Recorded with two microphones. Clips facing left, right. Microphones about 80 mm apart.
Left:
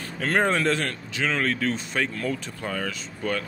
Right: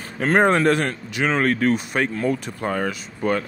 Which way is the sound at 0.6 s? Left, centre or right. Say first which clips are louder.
Right 6 dB; right.